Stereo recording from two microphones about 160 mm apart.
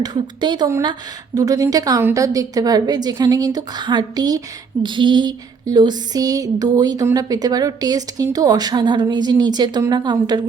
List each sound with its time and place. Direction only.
0.0 s a woman's voice: 30° right (ahead or behind)